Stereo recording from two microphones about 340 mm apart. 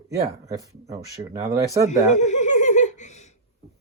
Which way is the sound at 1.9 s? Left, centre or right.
Left.